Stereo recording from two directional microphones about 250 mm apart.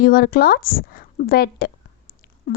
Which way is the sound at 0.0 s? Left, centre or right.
Left.